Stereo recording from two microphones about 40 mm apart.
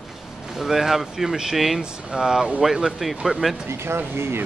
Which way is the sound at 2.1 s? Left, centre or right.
Centre.